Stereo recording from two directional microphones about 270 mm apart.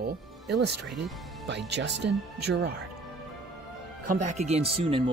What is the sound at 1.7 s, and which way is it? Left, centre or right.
Speech, right.